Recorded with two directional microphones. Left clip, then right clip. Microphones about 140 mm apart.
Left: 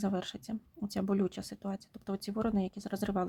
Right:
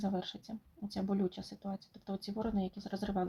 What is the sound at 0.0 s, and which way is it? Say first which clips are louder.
Speech: left 3 dB; 40° left (ahead or behind).